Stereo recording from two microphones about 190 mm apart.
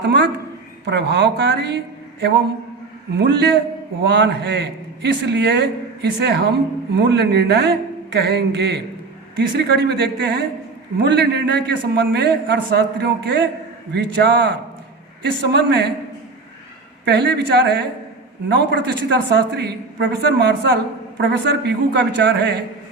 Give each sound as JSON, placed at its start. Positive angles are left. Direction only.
{"t": 0.0, "sound": "a man's voice", "side_deg": -65}
{"t": 17.1, "sound": "a man's voice", "side_deg": -65}